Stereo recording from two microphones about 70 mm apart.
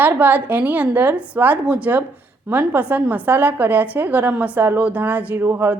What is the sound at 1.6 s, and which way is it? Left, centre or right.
A woman's voice, centre.